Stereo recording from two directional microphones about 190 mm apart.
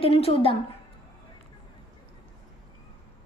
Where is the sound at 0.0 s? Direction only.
30° left (ahead or behind).